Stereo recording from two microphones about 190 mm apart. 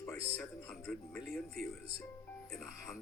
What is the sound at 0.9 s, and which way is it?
Music, 5° left (ahead or behind).